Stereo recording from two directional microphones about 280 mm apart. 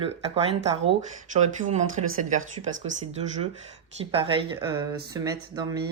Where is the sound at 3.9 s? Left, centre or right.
Right.